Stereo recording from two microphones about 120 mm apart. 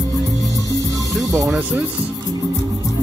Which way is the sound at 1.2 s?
30° right (ahead or behind).